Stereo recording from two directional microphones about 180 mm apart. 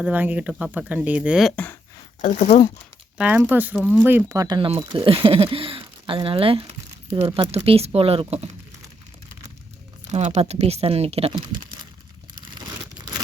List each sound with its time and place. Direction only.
0.0 s speech: 10° right (ahead or behind)
2.2 s speech: 40° left (ahead or behind)
3.2 s speech: 5° right (ahead or behind); by 8.4 s 35° right (ahead or behind)
10.1 s speech: 35° right (ahead or behind)